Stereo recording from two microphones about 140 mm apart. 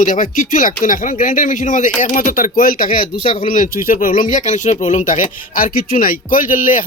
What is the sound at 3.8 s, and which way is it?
Speech, 85° left.